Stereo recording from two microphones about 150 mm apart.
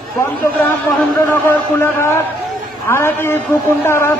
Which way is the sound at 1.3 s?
15° left (ahead or behind).